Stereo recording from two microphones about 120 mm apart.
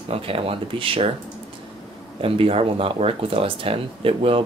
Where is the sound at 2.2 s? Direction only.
50° right (ahead or behind).